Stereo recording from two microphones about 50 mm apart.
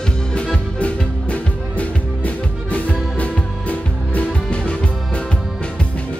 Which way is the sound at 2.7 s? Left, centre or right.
Left.